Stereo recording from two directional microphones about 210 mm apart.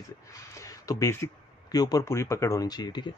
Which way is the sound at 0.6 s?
15° left (ahead or behind).